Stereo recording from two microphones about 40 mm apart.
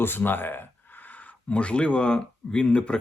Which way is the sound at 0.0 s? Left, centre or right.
Left.